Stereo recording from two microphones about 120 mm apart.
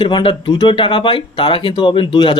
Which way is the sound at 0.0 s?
45° left (ahead or behind).